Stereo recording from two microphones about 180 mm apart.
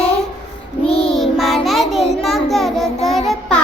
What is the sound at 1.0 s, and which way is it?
Child singing, centre (ahead or behind).